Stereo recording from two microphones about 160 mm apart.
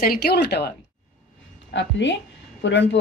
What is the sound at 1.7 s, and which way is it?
Speech, 90° left.